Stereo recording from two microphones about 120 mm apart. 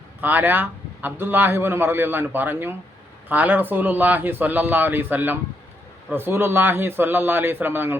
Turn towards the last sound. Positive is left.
turn(degrees=-20)  # may be behind; listen again after turning